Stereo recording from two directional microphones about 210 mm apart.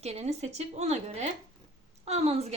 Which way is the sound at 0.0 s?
30° right (ahead or behind).